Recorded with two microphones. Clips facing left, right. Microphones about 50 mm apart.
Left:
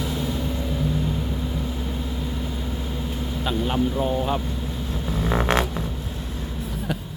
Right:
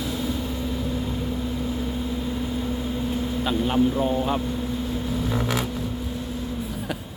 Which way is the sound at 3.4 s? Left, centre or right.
Centre.